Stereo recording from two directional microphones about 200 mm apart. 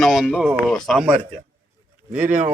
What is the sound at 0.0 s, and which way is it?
Speech, centre (ahead or behind).